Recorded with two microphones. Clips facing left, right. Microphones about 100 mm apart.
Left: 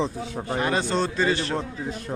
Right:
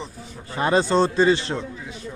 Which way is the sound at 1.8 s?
50° left (ahead or behind).